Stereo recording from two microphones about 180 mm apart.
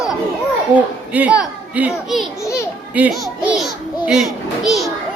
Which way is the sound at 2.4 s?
15° left (ahead or behind).